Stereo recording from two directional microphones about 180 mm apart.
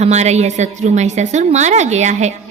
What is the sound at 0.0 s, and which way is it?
A woman's voice, 40° right (ahead or behind).